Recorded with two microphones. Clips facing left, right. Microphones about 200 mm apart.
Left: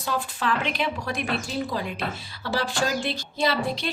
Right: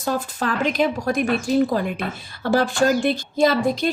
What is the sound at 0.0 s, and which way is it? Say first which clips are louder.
Speech: right 4 dB; 45° right (ahead or behind).